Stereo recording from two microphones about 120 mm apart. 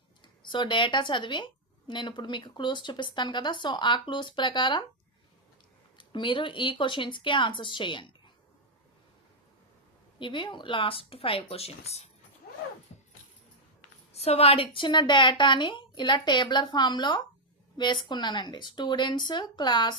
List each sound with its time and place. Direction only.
0.4 s a woman's voice: 40° left (ahead or behind)
6.0 s speech: 40° left (ahead or behind)
10.2 s speech: 40° left (ahead or behind); by 12.0 s 60° left (ahead or behind)
14.1 s a woman's voice: 60° left (ahead or behind); by 20.0 s 40° left (ahead or behind)